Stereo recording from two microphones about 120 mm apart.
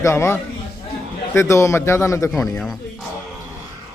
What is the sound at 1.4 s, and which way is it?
Speech, 25° left (ahead or behind).